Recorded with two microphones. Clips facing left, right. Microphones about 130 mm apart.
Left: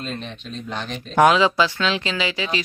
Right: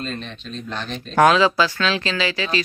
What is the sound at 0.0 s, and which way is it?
Speech, 15° left (ahead or behind).